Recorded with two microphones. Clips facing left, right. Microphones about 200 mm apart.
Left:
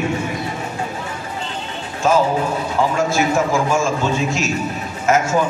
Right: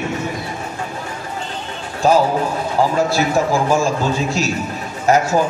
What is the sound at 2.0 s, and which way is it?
A man's voice, 35° right (ahead or behind).